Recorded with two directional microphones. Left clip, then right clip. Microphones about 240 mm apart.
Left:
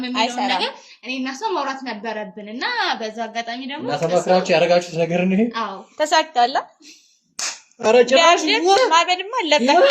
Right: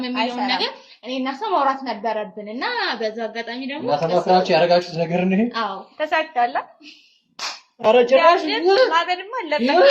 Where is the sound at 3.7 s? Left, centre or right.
Left.